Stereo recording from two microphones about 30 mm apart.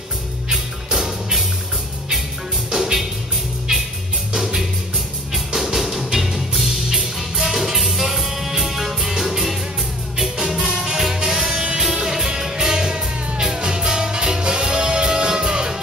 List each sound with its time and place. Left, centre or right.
0.5 s music: centre
2.7 s music: centre
5.3 s music: centre; by 15.7 s right